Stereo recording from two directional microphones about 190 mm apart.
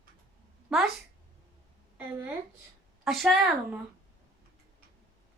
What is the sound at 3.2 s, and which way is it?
Speech, centre (ahead or behind).